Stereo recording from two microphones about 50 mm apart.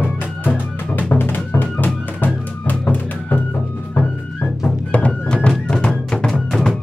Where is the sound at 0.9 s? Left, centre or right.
Left.